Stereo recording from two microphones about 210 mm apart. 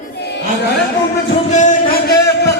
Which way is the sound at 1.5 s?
35° left (ahead or behind).